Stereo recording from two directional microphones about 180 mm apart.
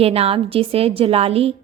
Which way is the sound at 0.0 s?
35° right (ahead or behind).